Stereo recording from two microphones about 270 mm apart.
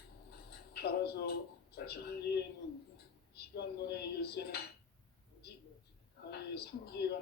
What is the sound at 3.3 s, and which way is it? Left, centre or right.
Dishes, left.